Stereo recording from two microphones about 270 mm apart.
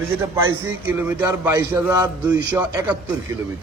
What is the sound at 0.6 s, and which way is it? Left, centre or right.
A man's voice, centre.